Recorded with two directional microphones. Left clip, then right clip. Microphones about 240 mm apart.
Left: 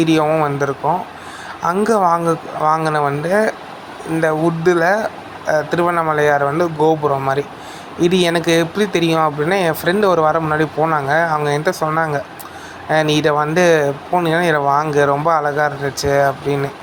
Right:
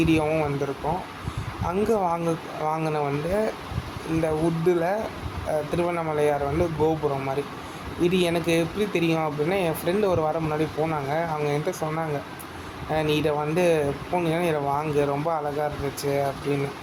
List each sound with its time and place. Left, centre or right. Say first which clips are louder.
0.0 s speech: left 8 dB; centre
1.6 s speech: left 9 dB; centre